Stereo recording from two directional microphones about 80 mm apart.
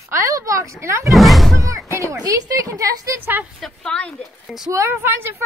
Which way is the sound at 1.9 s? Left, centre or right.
Right.